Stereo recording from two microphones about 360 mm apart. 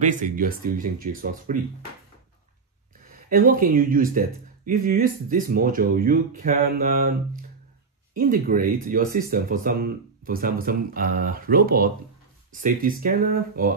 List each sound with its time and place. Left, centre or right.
0.0 s speech: right
3.3 s speech: right